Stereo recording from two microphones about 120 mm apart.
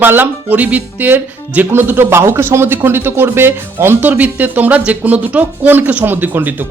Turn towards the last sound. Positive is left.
turn(degrees=-15)  # may be behind; listen again after turning